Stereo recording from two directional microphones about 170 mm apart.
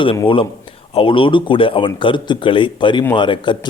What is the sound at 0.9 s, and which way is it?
A man's voice, 30° left (ahead or behind).